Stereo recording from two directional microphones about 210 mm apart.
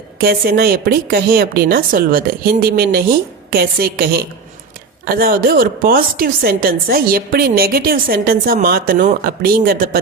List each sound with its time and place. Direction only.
0.2 s a woman's voice: 50° right (ahead or behind)